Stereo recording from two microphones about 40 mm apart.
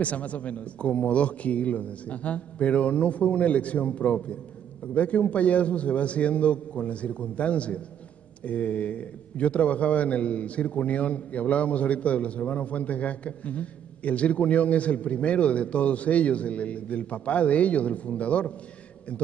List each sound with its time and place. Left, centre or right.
0.0 s a man's voice: left